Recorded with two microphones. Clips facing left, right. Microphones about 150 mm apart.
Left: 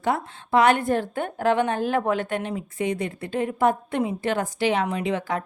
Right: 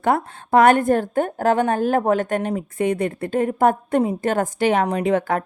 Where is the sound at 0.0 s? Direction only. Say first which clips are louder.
Right 5 dB; 50° right (ahead or behind).